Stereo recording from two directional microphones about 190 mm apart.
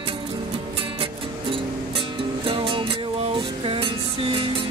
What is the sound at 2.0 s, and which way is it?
Music, 25° right (ahead or behind).